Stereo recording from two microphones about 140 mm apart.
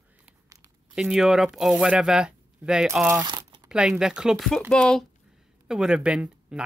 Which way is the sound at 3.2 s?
30° right (ahead or behind).